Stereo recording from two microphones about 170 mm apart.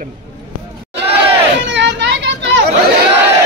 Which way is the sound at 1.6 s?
90° right.